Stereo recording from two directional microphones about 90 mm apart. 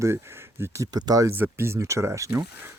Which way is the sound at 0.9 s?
45° right (ahead or behind).